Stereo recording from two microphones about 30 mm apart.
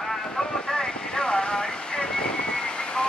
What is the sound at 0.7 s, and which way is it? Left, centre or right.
Vehicle, left.